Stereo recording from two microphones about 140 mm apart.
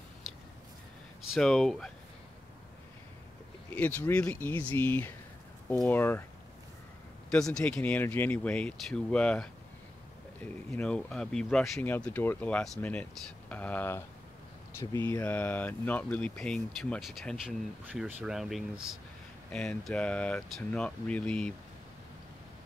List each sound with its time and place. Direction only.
1.3 s speech: 5° left (ahead or behind)
3.7 s speech: 10° left (ahead or behind)
7.2 s speech: 5° left (ahead or behind)
10.8 s speech: 5° left (ahead or behind)